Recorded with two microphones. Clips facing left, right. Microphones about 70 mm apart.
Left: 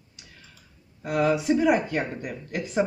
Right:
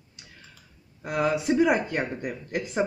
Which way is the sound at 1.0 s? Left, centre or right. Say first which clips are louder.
Left 2 dB; centre.